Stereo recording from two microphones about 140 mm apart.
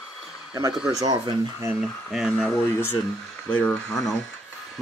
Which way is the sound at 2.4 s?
15° left (ahead or behind).